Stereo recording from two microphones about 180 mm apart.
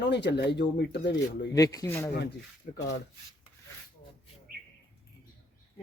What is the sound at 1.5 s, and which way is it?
Speech, 20° left (ahead or behind).